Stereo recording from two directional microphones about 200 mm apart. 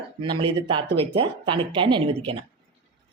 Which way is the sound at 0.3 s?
25° right (ahead or behind).